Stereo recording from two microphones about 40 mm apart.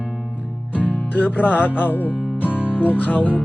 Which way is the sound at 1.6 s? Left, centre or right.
Left.